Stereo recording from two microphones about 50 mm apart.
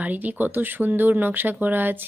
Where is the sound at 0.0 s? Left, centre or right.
Right.